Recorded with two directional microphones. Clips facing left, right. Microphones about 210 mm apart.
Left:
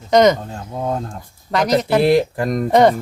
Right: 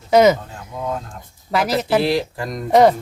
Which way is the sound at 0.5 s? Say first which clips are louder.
Left 3 dB; 35° left (ahead or behind).